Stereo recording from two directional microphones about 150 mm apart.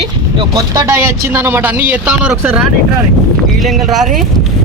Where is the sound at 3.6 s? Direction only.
Centre (ahead or behind).